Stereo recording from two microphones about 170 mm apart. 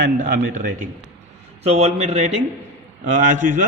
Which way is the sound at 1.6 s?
40° right (ahead or behind).